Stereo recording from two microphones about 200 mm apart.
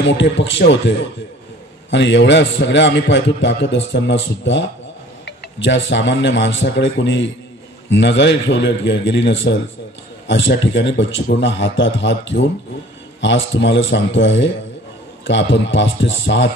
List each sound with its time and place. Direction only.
0.0 s a man's voice: 65° left (ahead or behind)